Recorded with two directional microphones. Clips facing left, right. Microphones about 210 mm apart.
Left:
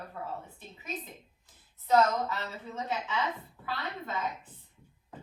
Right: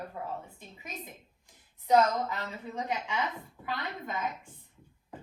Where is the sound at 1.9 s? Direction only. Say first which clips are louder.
Right 1 dB; 15° right (ahead or behind).